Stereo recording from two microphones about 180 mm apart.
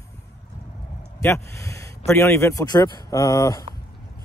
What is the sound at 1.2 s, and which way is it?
Speech, 15° left (ahead or behind).